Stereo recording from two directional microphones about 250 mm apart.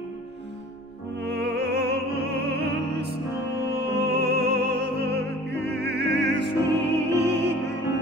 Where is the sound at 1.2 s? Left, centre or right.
Right.